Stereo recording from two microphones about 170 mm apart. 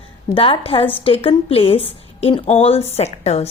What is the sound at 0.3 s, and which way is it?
Speech, 35° left (ahead or behind).